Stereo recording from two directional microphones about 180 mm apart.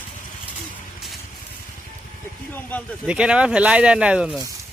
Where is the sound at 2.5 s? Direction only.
10° left (ahead or behind).